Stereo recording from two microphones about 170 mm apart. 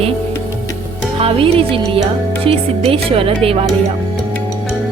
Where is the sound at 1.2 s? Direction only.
35° right (ahead or behind).